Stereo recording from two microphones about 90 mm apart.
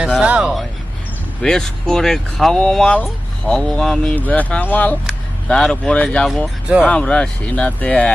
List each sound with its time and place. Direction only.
0.0 s speech: 10° right (ahead or behind)
1.4 s speech: 5° left (ahead or behind)
4.1 s speech: 20° left (ahead or behind)